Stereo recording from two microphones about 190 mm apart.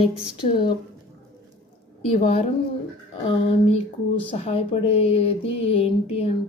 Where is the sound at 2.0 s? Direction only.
30° left (ahead or behind).